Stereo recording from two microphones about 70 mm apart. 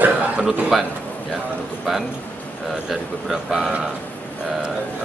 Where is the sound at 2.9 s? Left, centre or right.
Centre.